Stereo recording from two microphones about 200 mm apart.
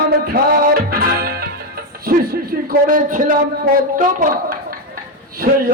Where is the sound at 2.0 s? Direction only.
45° right (ahead or behind).